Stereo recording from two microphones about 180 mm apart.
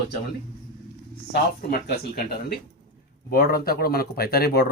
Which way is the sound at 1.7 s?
60° left (ahead or behind).